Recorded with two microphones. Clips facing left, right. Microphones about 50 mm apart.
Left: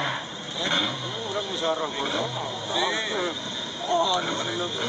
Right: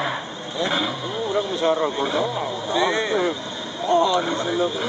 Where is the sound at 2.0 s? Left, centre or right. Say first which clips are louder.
Right 5 dB; centre.